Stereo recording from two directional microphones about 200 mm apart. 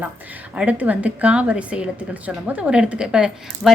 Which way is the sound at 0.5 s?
5° right (ahead or behind).